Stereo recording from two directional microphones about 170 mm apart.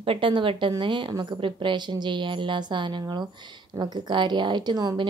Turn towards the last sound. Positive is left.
turn(degrees=-25)  # may be behind; listen again after turning